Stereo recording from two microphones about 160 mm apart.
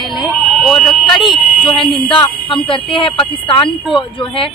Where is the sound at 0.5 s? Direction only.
Centre (ahead or behind).